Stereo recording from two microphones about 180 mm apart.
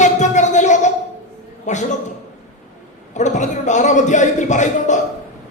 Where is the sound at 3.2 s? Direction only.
40° left (ahead or behind).